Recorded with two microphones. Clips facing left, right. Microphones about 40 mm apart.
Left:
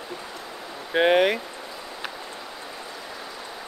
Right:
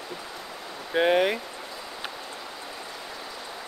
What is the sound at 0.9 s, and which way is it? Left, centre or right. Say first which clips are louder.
Speech: left 3 dB; left.